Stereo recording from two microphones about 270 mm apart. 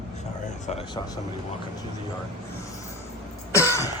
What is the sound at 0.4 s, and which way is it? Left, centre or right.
Speech, left.